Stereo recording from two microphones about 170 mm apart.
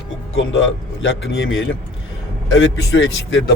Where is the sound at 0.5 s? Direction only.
90° left.